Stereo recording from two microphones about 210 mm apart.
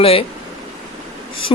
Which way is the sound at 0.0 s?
25° left (ahead or behind).